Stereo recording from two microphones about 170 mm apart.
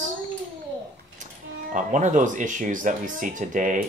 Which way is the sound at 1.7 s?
45° right (ahead or behind).